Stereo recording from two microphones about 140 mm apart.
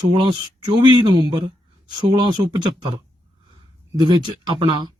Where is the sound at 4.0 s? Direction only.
30° right (ahead or behind).